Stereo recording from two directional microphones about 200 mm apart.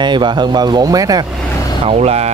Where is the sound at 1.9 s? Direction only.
30° right (ahead or behind).